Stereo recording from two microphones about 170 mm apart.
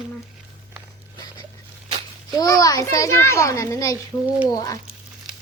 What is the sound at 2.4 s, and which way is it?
A child's voice, 20° left (ahead or behind).